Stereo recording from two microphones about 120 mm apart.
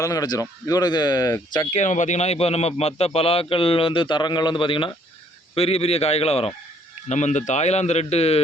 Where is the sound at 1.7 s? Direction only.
85° left; by 4.9 s 45° left (ahead or behind).